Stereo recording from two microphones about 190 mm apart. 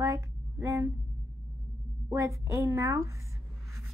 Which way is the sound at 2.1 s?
15° right (ahead or behind).